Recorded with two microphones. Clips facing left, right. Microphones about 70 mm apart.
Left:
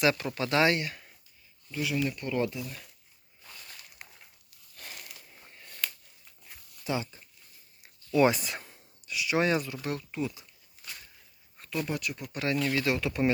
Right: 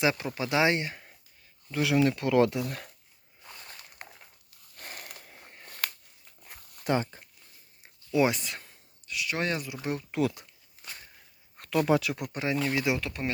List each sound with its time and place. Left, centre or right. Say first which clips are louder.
0.0 s speech: left 1 dB; centre
0.7 s speech: right 1 dB; right
1.7 s speech: right 6 dB; right
3.4 s a sound: right 2 dB; right
5.6 s a sound: right 2 dB; right
6.4 s dog: right 4 dB; right
8.3 s speech: left 2 dB; centre
9.6 s speech: right 1 dB; centre
10.1 s speech: right 6 dB; right
10.8 s a sound: right 1 dB; right
11.5 s speech: right 8 dB; right
12.5 s speech: even; centre
13.0 s speech: left 6 dB; centre